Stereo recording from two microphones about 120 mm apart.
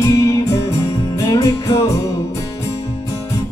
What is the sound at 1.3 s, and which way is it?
Music, 25° left (ahead or behind).